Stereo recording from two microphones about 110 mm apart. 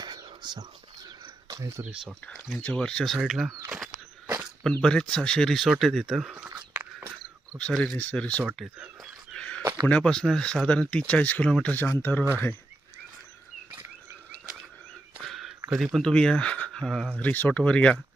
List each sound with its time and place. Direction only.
0.0 s whispering: 40° right (ahead or behind)
1.2 s a sound: 35° right (ahead or behind)
1.8 s speech: 10° right (ahead or behind)
2.6 s speech: 10° left (ahead or behind)
4.6 s speech: 5° left (ahead or behind); by 6.7 s 10° right (ahead or behind)
7.6 s speech: 10° left (ahead or behind)
9.3 s a sound: 10° left (ahead or behind)
9.8 s speech: 10° left (ahead or behind)
15.2 s a sound: centre (ahead or behind)
15.7 s speech: centre (ahead or behind)
17.2 s speech: 15° left (ahead or behind)